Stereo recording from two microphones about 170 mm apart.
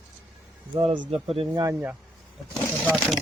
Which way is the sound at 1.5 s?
20° right (ahead or behind).